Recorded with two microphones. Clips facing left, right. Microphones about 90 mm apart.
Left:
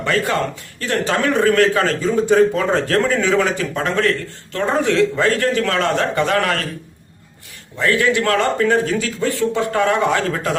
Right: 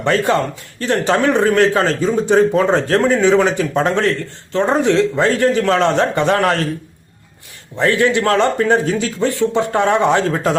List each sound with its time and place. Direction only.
0.0 s a man's voice: 30° right (ahead or behind)
7.8 s a man's voice: 30° right (ahead or behind)